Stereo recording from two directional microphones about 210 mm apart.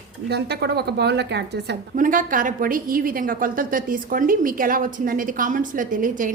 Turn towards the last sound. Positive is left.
turn(degrees=-40)  # may be behind; listen again after turning